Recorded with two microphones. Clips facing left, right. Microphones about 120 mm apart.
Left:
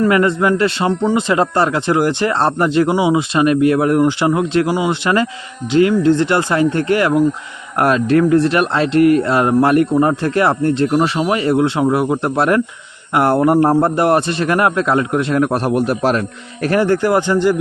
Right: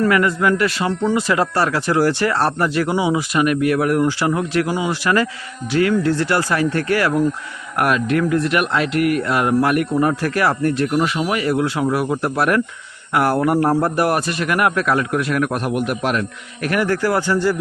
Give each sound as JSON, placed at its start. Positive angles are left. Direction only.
{"t": 0.0, "sound": "speech", "side_deg": 25}